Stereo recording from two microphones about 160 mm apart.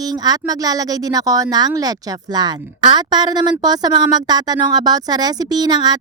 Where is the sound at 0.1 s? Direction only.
25° right (ahead or behind).